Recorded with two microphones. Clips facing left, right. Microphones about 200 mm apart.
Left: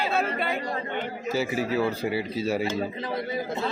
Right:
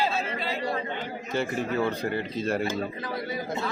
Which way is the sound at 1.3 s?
5° left (ahead or behind).